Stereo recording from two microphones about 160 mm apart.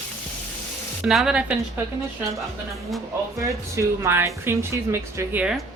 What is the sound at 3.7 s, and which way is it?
Speech, 15° right (ahead or behind).